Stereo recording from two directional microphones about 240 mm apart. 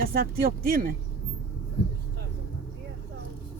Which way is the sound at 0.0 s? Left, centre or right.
Right.